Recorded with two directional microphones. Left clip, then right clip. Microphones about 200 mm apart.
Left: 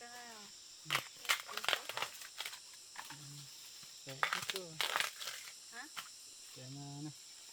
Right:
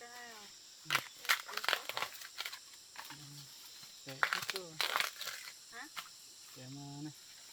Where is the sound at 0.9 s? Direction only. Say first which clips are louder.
Right 2 dB; 15° right (ahead or behind).